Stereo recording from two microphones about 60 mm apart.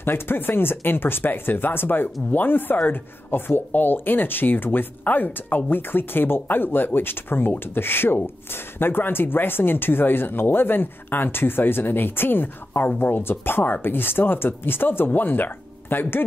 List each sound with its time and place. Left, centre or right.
0.0 s speech: left